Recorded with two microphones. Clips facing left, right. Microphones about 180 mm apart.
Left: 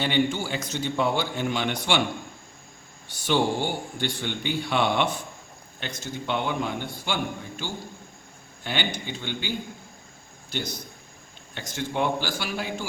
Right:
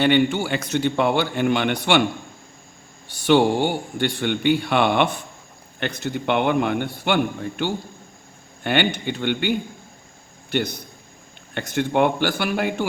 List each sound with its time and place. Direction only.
0.0 s a man's voice: 65° right (ahead or behind)
3.1 s a man's voice: 65° right (ahead or behind)